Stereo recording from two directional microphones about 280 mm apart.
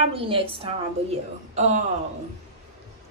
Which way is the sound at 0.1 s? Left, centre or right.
Centre.